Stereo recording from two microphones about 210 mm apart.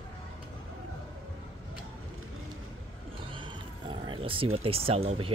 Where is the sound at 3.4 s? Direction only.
25° right (ahead or behind).